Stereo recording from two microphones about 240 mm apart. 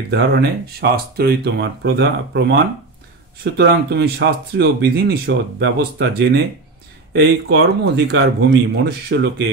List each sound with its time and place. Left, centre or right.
0.1 s speech: right